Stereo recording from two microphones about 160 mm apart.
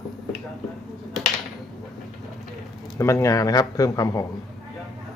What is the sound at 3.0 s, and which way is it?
A man's voice, 15° left (ahead or behind).